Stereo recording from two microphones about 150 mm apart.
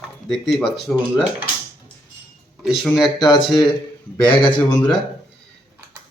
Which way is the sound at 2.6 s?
Centre (ahead or behind).